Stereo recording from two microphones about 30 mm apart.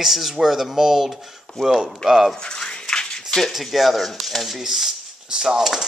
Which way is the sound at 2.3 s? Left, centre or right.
Left.